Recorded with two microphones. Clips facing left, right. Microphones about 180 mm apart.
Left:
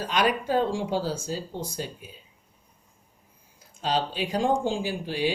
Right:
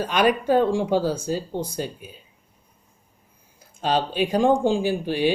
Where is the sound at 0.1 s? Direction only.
60° right (ahead or behind).